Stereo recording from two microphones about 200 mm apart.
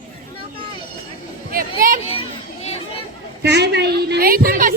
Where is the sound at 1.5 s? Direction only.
45° right (ahead or behind).